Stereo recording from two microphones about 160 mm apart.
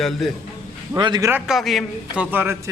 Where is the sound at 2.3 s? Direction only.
10° right (ahead or behind).